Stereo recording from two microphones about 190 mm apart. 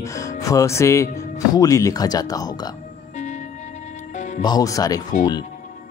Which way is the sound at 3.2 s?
40° left (ahead or behind).